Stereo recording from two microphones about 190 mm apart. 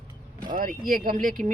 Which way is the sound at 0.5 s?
45° right (ahead or behind).